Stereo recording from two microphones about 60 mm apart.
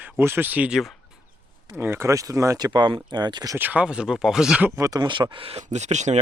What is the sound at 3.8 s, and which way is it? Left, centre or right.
Speech, centre.